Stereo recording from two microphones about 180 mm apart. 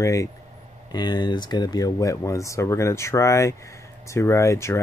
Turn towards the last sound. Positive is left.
turn(degrees=15)  # may be behind; listen again after turning